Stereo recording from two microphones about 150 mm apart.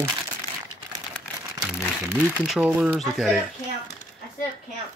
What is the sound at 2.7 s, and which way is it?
Speech, 10° right (ahead or behind).